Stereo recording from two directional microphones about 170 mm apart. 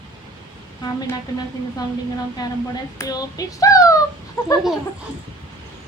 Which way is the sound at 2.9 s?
20° left (ahead or behind).